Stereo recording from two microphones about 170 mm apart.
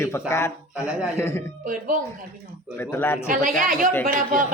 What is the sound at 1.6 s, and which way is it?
Speech, 50° right (ahead or behind).